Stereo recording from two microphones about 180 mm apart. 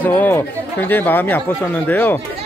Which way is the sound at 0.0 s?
10° left (ahead or behind).